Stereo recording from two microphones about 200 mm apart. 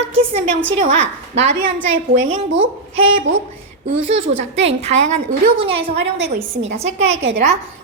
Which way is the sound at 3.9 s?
75° right (ahead or behind).